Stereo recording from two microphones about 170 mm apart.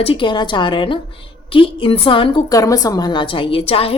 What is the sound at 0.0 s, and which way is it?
A woman's voice, 30° left (ahead or behind).